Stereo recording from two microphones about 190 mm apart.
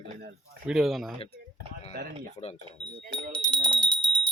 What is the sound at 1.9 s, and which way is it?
Speech, 55° right (ahead or behind).